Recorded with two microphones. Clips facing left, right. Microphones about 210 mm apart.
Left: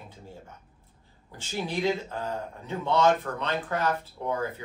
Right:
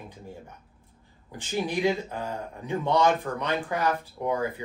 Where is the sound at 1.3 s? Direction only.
15° right (ahead or behind).